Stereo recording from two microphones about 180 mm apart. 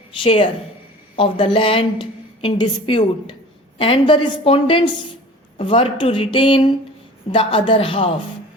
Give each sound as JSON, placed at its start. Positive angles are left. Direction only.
{"t": 0.2, "sound": "a woman's voice", "side_deg": 30}